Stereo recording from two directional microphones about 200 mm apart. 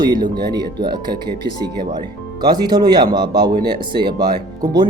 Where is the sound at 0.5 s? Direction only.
20° right (ahead or behind).